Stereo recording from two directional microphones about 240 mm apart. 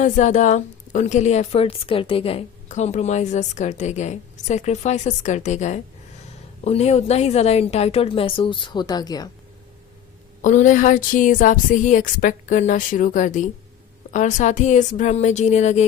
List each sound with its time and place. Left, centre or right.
0.0 s a woman's voice: left
10.4 s a woman's voice: left